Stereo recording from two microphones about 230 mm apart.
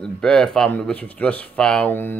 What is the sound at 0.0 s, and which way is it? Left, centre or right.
Speech, centre.